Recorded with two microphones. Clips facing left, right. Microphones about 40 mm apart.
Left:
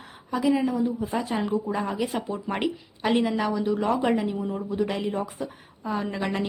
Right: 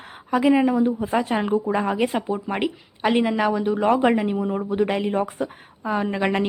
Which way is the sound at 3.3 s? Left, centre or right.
Right.